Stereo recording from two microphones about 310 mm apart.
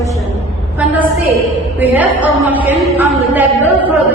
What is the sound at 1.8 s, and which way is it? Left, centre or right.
A woman's voice, centre.